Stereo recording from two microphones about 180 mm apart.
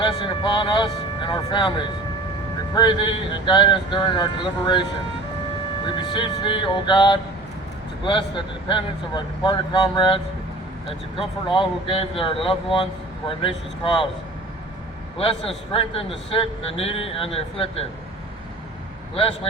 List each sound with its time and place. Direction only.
0.0 s speech: 30° left (ahead or behind)
11.4 s speech: 25° left (ahead or behind)
15.2 s speech: 30° left (ahead or behind)